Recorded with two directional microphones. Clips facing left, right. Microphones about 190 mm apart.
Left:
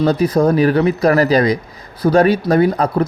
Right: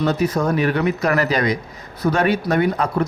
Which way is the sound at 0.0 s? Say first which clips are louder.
Left 5 dB; 35° left (ahead or behind).